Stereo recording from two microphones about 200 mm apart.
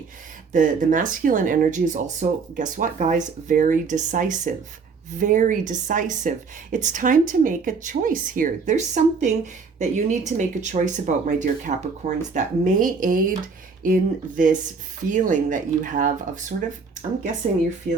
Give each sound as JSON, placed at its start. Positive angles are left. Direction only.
{"t": 0.5, "sound": "speech", "side_deg": -40}